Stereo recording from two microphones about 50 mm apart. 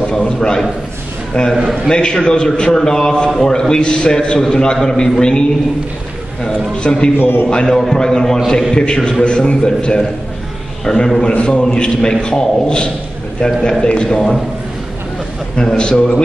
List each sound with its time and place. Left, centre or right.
0.0 s a man's voice: centre
6.4 s a man's voice: centre
7.2 s a man's voice: left
7.4 s a man's voice: centre
10.8 s a man's voice: centre
15.5 s a man's voice: centre